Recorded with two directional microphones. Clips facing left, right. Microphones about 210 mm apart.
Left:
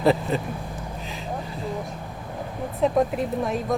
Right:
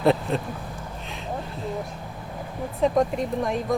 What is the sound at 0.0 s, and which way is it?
Speech, centre (ahead or behind).